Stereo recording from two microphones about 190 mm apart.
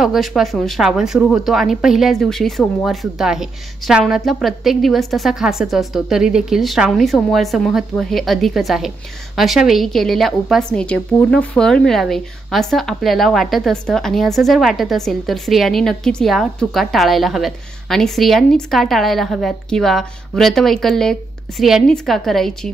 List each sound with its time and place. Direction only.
0.0 s a woman's voice: centre (ahead or behind)